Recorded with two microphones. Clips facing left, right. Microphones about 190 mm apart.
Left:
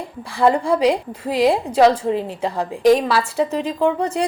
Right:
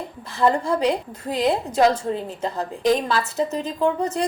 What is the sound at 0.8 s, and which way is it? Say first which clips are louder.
A woman's voice: left 4 dB; 10° left (ahead or behind).